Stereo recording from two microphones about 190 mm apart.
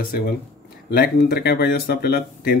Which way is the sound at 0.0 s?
50° left (ahead or behind).